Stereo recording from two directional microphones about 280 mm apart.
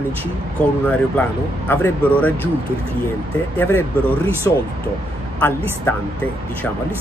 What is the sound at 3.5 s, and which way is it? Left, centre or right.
Speech, centre.